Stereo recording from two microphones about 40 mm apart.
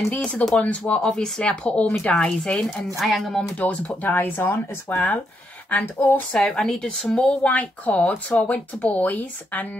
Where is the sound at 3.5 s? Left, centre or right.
Left.